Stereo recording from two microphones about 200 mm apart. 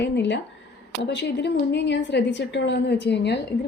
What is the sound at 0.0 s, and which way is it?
A woman's voice, 60° left (ahead or behind).